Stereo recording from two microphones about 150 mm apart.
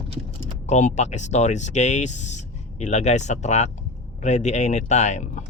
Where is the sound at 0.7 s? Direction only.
50° left (ahead or behind).